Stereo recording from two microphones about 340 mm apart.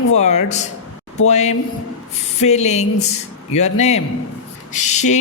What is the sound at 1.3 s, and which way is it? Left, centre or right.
Male singing, centre.